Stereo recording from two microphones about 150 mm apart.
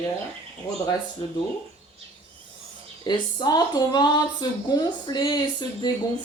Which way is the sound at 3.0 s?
30° left (ahead or behind).